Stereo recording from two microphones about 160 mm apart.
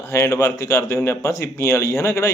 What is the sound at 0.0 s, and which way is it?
A man's voice, 15° left (ahead or behind).